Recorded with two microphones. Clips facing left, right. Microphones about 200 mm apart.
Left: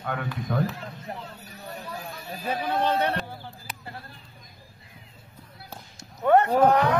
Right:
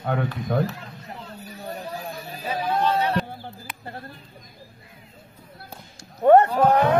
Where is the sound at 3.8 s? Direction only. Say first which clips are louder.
Right 6 dB; 45° right (ahead or behind).